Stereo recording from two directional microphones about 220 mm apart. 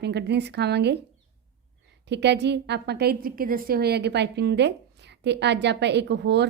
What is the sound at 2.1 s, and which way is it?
A woman's voice, 50° right (ahead or behind).